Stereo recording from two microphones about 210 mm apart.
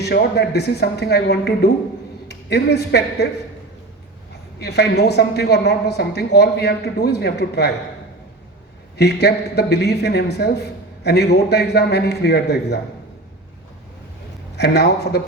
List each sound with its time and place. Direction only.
0.0 s a woman's voice: 50° left (ahead or behind)
4.6 s a woman's voice: 50° left (ahead or behind)
9.0 s a woman's voice: 50° left (ahead or behind)
14.5 s a woman's voice: 50° left (ahead or behind)